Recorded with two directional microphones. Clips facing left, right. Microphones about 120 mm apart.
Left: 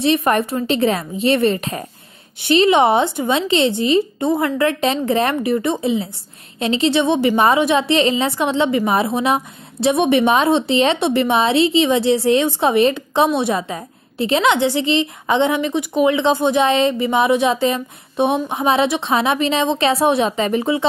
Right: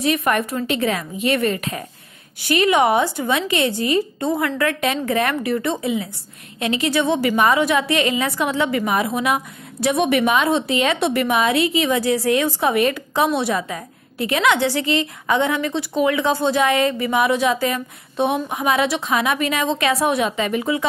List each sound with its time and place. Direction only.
0.0 s a woman's voice: 30° left (ahead or behind)